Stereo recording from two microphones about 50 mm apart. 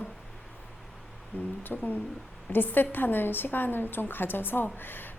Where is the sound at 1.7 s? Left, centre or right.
Centre.